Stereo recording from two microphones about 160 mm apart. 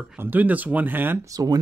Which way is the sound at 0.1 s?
10° right (ahead or behind).